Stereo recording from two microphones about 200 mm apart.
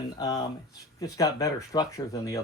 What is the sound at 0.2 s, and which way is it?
Speech, 20° left (ahead or behind).